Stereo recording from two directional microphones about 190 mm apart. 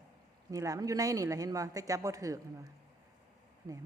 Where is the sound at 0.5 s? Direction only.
20° right (ahead or behind).